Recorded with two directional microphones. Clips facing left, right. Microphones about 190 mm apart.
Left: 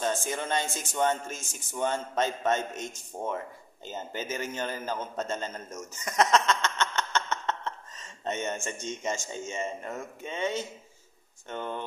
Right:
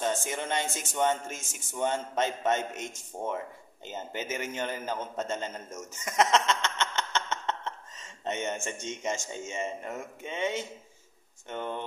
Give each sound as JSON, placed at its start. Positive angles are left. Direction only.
{"t": 0.0, "sound": "speech", "side_deg": -20}
{"t": 5.9, "sound": "a sound", "side_deg": -20}
{"t": 8.2, "sound": "speech", "side_deg": -20}